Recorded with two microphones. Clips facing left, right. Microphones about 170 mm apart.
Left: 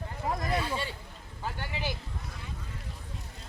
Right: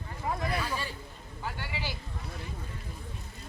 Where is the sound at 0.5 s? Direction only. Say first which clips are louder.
Left 2 dB; 25° left (ahead or behind).